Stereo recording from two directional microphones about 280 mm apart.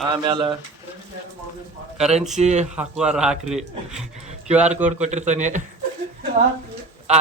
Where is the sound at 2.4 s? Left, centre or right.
Right.